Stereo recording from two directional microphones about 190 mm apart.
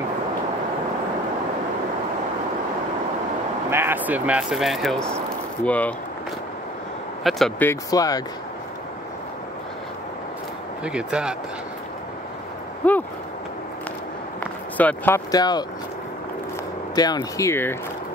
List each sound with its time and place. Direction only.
3.7 s speech: 10° right (ahead or behind); by 5.9 s 10° left (ahead or behind)
7.2 s speech: centre (ahead or behind); by 8.2 s 20° left (ahead or behind)
10.8 s speech: 5° right (ahead or behind)
12.8 s a sound: 5° left (ahead or behind)
14.8 s speech: 10° left (ahead or behind)
16.9 s speech: 20° left (ahead or behind)